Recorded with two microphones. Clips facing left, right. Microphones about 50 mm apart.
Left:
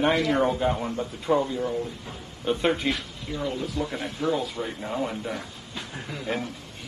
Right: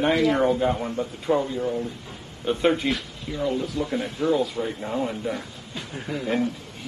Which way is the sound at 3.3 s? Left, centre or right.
Left.